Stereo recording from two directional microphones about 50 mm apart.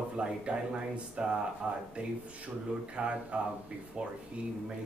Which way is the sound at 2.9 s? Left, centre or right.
Right.